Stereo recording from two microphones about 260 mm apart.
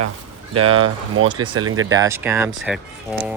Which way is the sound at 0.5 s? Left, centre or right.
Right.